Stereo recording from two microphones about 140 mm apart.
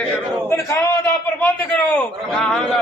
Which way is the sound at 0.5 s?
20° left (ahead or behind).